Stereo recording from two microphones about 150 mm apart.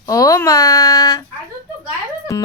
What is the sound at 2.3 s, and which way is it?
Speech, 20° left (ahead or behind).